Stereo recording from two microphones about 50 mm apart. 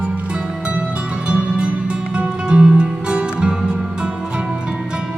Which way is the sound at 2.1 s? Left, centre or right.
Right.